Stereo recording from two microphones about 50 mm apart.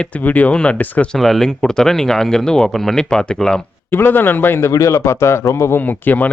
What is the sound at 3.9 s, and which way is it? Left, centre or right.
Speech, left.